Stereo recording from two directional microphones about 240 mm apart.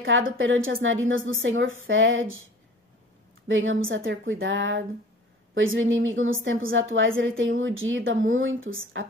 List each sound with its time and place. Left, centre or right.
0.4 s a woman's voice: right
3.4 s a woman's voice: right